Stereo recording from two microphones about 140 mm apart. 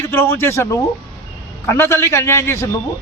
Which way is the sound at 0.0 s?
15° left (ahead or behind).